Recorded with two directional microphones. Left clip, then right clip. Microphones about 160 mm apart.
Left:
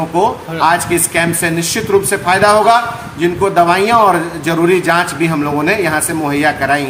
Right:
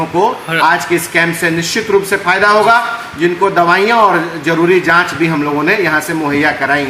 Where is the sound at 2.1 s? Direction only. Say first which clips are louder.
Even; 35° left (ahead or behind).